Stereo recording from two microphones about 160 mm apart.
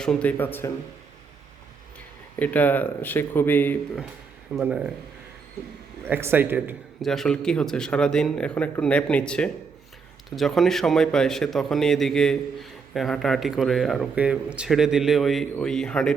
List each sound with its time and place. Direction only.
0.0 s speech: 5° left (ahead or behind)
2.4 s speech: 10° left (ahead or behind)
4.5 s speech: 5° right (ahead or behind)
6.1 s speech: 15° right (ahead or behind)
7.0 s a man's voice: centre (ahead or behind)